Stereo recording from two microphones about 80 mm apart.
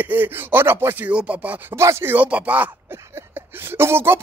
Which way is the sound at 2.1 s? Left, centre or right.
Centre.